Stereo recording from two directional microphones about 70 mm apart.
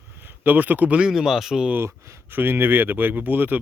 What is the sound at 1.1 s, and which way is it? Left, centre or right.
Speech, centre.